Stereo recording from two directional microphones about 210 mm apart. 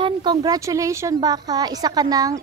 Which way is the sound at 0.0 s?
20° right (ahead or behind).